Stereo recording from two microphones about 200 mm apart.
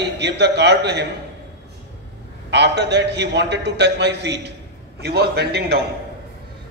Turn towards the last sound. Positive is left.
turn(degrees=-55)  # may be behind; listen again after turning